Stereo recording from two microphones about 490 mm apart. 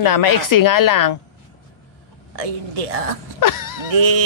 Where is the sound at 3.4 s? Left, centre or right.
Left.